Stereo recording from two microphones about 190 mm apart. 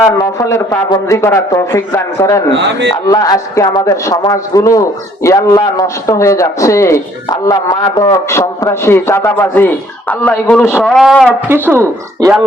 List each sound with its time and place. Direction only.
0.3 s a man's voice: 15° left (ahead or behind)
2.6 s a man's voice: 65° right (ahead or behind)
2.9 s a man's voice: 20° left (ahead or behind); by 11.3 s centre (ahead or behind)
11.4 s speech: 10° right (ahead or behind)